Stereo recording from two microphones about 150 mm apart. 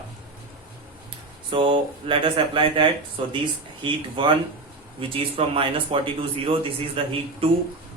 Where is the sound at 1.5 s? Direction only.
35° right (ahead or behind).